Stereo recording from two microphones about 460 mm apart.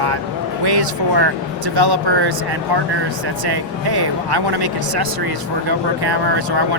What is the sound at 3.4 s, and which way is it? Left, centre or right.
Speech, right.